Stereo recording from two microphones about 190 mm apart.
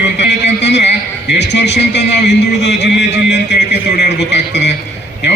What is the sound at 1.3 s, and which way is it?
A man's voice, 65° left (ahead or behind).